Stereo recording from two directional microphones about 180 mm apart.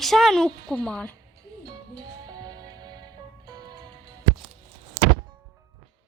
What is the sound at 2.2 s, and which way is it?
Music, 20° right (ahead or behind).